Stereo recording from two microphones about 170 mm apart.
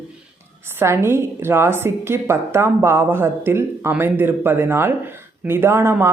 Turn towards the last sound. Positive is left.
turn(degrees=-15)  # may be behind; listen again after turning